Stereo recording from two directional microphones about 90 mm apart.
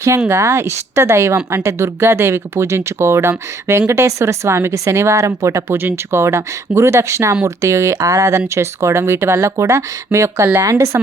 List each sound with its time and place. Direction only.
0.3 s speech: 30° right (ahead or behind)